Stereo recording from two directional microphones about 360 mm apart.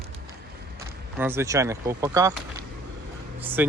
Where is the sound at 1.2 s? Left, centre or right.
Centre.